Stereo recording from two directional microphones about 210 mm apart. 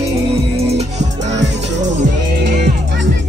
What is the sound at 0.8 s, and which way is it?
Music, 35° right (ahead or behind).